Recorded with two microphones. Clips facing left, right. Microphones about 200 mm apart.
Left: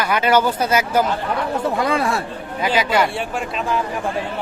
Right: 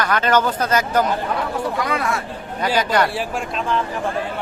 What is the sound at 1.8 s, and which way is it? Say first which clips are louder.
Speech: left 3 dB; 30° left (ahead or behind).